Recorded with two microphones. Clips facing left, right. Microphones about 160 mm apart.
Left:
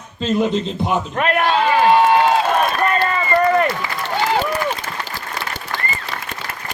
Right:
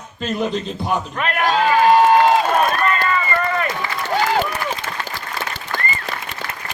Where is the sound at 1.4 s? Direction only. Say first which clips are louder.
Right 2 dB; 40° right (ahead or behind).